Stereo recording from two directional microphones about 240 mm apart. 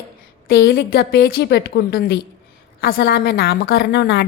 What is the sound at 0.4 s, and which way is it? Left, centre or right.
A woman's voice, left.